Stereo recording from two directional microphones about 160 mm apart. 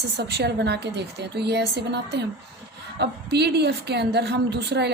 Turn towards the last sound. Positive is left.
turn(degrees=-90)